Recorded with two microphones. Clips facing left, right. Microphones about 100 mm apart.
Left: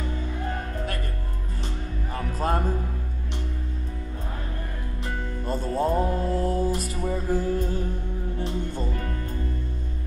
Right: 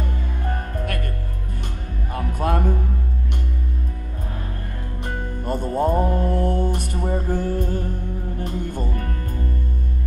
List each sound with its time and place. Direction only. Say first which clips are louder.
2.1 s music: right 3 dB; 60° right (ahead or behind)
5.0 s music: right 3 dB; 55° right (ahead or behind)
6.0 s mantra: right 3 dB; 55° right (ahead or behind)
7.1 s music: right 1 dB; 60° right (ahead or behind)
8.4 s speech: right 2 dB; 50° right (ahead or behind)